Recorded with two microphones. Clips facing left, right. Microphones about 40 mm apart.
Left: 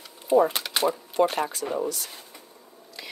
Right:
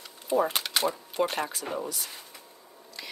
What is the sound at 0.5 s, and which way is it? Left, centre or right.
Speech, centre.